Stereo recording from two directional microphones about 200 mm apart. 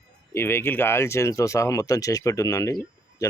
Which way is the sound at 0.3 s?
10° left (ahead or behind).